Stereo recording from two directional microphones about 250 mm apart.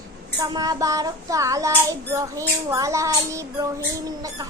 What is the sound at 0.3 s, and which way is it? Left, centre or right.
A woman's voice, centre.